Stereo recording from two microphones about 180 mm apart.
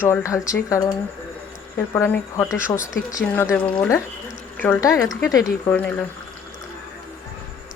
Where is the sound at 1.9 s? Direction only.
15° left (ahead or behind).